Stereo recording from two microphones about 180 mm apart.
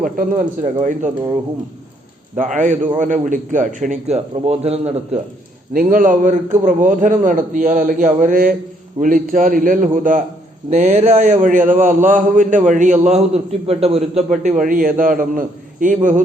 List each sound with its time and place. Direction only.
0.0 s a man's voice: 45° right (ahead or behind)
2.3 s a man's voice: 45° right (ahead or behind)
5.7 s a man's voice: 50° right (ahead or behind)